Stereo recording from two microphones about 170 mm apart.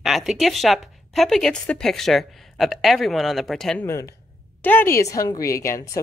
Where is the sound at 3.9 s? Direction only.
20° left (ahead or behind).